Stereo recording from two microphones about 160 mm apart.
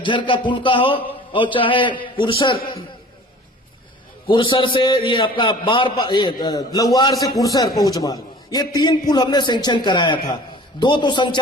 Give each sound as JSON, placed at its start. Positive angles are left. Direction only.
{"t": 0.0, "sound": "a man's voice", "side_deg": 30}
{"t": 4.3, "sound": "a man's voice", "side_deg": 30}